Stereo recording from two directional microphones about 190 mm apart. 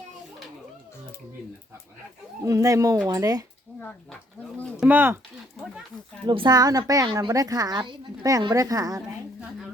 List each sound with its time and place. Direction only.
2.4 s a woman's voice: 15° right (ahead or behind)
3.8 s speech: 5° left (ahead or behind)
4.8 s speech: 10° right (ahead or behind)
6.2 s a woman's voice: 25° right (ahead or behind)